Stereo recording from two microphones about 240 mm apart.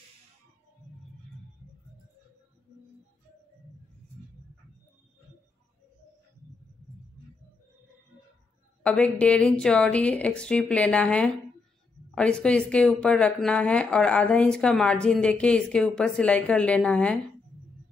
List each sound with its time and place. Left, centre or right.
8.8 s speech: centre